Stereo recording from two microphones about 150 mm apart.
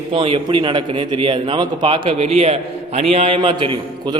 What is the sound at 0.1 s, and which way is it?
A man's voice, 35° right (ahead or behind).